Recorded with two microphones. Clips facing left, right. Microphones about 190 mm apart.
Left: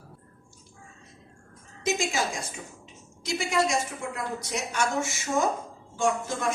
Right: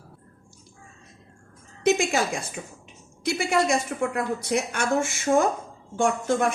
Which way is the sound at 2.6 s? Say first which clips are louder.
Right 4 dB; 50° right (ahead or behind).